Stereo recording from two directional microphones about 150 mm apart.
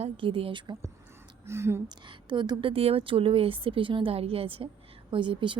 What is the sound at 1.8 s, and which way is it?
A woman's voice, 30° right (ahead or behind).